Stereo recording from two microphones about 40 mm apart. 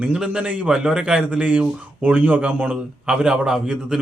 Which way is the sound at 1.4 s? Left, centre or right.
Right.